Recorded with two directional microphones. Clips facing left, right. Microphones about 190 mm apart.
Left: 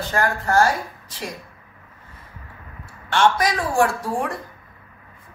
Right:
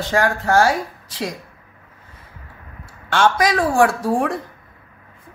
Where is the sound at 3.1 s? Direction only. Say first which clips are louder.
Right 2 dB; 90° right.